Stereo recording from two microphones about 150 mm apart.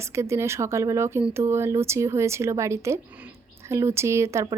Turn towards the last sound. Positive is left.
turn(degrees=-20)  # may be behind; listen again after turning